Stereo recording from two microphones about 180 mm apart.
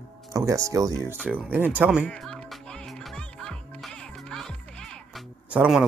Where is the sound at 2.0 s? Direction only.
5° left (ahead or behind).